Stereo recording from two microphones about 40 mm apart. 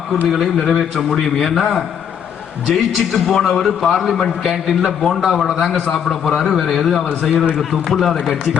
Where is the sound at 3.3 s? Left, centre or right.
Centre.